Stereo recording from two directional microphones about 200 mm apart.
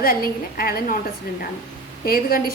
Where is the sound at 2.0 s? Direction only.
50° left (ahead or behind).